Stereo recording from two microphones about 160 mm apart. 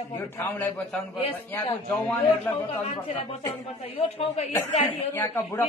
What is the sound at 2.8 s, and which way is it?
Speech, 40° left (ahead or behind).